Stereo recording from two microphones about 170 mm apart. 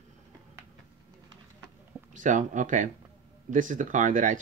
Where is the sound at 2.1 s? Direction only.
50° right (ahead or behind).